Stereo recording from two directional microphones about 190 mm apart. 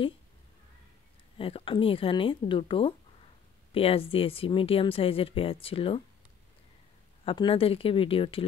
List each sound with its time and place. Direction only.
1.4 s speech: 30° left (ahead or behind)
7.2 s speech: 30° left (ahead or behind)